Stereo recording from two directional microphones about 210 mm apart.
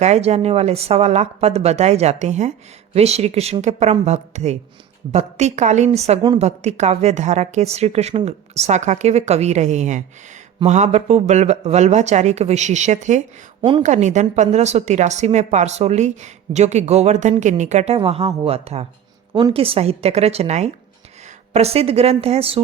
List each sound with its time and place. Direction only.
0.0 s a woman's voice: 30° right (ahead or behind)